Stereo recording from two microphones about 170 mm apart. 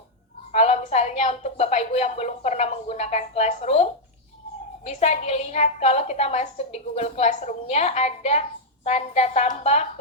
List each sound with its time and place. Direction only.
0.5 s a woman's voice: 40° left (ahead or behind)